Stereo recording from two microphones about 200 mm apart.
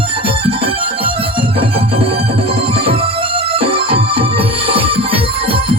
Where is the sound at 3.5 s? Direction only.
25° right (ahead or behind).